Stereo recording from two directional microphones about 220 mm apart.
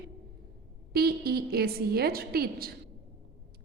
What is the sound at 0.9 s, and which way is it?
A woman's voice, 45° right (ahead or behind).